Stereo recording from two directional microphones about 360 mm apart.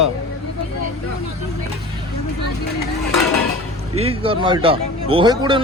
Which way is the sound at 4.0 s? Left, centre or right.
Centre.